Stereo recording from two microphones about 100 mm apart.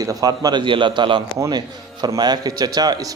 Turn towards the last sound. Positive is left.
turn(degrees=-40)  # may be behind; listen again after turning